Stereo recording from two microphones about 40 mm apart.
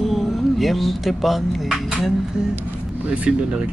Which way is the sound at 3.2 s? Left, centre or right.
Right.